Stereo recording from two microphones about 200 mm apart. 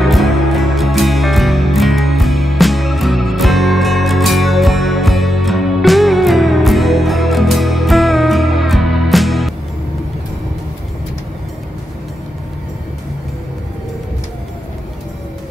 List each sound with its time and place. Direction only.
0.0 s music: centre (ahead or behind)